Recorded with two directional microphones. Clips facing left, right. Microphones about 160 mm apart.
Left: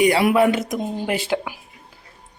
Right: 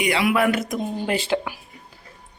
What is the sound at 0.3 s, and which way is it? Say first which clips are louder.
Speech: left 3 dB; 25° left (ahead or behind).